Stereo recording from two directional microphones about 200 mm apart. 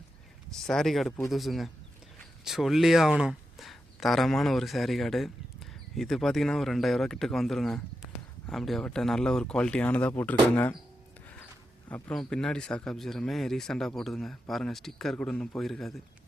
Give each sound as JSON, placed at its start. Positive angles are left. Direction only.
{"t": 0.5, "sound": "speech", "side_deg": 0}
{"t": 11.9, "sound": "speech", "side_deg": 10}